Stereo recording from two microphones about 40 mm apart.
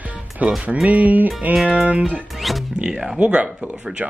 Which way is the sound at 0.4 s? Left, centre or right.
Right.